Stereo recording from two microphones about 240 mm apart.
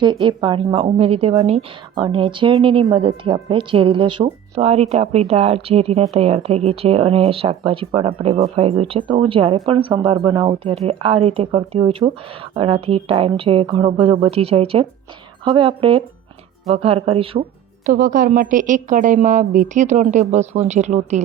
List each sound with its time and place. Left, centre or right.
0.0 s speech: centre
17.8 s a woman's voice: right